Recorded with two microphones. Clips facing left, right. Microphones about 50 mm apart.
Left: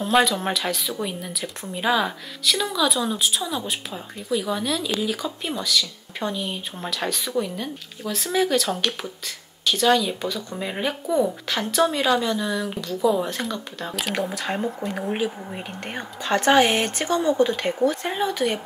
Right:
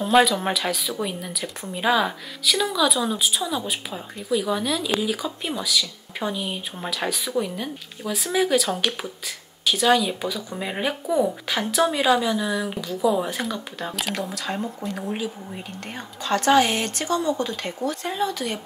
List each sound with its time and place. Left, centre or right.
0.0 s speech: centre
14.1 s a woman's voice: left